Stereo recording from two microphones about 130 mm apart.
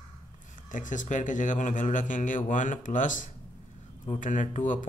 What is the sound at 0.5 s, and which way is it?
Speech, 85° left.